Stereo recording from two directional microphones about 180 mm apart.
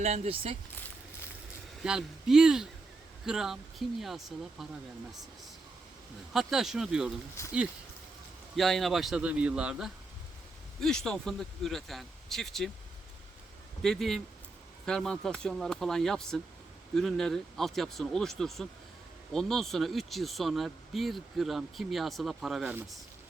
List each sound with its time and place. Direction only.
0.0 s speech: 40° right (ahead or behind)
1.8 s speech: 5° right (ahead or behind)
6.3 s speech: centre (ahead or behind)
7.4 s speech: 15° left (ahead or behind)
8.5 s speech: centre (ahead or behind)
13.8 s speech: centre (ahead or behind)